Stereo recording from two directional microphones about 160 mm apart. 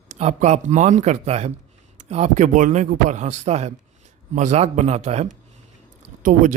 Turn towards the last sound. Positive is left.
turn(degrees=-55)  # may be behind; listen again after turning